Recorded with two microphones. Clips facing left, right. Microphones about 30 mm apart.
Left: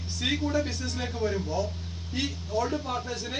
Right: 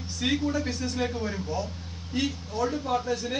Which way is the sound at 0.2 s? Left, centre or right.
Centre.